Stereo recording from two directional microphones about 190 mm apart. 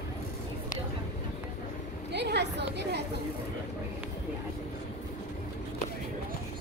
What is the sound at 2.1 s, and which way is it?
Chatter, 60° right (ahead or behind).